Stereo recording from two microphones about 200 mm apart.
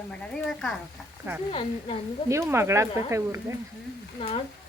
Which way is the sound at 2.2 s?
15° right (ahead or behind).